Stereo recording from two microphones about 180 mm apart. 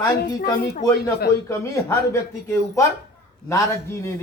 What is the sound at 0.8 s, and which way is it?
Speech, 20° left (ahead or behind).